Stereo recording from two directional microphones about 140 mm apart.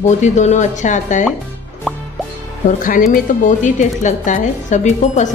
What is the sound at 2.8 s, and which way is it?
A woman's voice, 75° left (ahead or behind).